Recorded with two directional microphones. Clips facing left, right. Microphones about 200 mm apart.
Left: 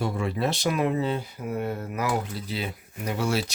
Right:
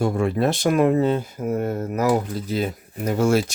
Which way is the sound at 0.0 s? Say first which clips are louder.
Right 6 dB; 50° right (ahead or behind).